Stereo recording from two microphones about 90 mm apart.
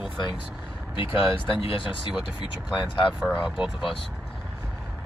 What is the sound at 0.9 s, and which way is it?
Speech, 75° left (ahead or behind).